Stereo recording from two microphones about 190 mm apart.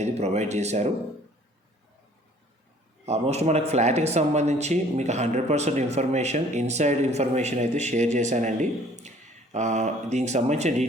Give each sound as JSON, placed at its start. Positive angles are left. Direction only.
{"t": 0.0, "sound": "speech", "side_deg": -35}
{"t": 3.1, "sound": "speech", "side_deg": -35}